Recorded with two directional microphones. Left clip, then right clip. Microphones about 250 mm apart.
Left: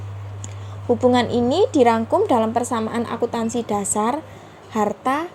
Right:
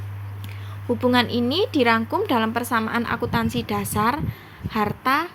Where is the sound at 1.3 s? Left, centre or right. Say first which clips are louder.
Left 4 dB; right.